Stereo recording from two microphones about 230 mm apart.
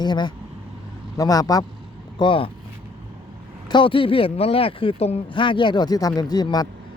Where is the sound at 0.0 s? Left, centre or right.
Centre.